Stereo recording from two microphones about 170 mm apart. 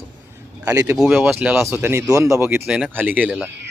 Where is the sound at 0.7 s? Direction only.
20° right (ahead or behind).